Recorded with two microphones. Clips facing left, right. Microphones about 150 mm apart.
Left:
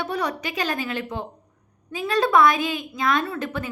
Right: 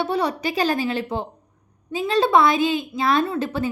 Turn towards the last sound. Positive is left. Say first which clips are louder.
# right 4 dB
turn(degrees=-30)  # may be behind; listen again after turning